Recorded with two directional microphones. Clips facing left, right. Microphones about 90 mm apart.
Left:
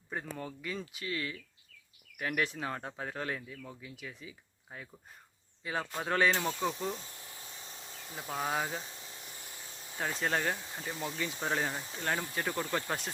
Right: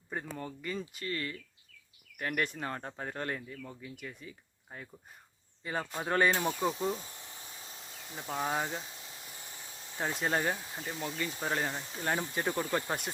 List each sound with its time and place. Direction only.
0.1 s speech: centre (ahead or behind)
6.4 s speech: 15° right (ahead or behind)
6.7 s speech: centre (ahead or behind)
8.1 s speech: centre (ahead or behind)
10.0 s speech: 10° right (ahead or behind)
12.0 s speech: 15° right (ahead or behind)